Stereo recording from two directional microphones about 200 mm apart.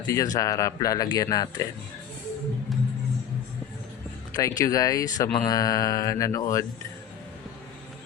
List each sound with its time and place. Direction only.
0.0 s speech: 15° left (ahead or behind)
4.4 s speech: 15° left (ahead or behind)